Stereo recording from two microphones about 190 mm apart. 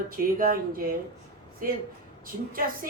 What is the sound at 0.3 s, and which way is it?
Speech, 50° right (ahead or behind).